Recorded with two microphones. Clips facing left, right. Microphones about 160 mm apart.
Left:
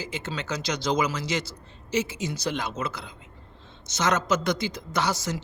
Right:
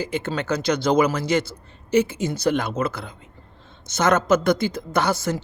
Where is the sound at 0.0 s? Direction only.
55° right (ahead or behind).